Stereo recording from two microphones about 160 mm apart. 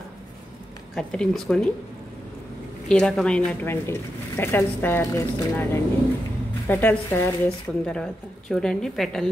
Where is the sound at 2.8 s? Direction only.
5° left (ahead or behind).